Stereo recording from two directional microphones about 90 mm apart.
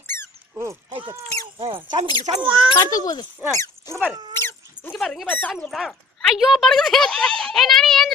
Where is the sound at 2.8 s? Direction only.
45° left (ahead or behind).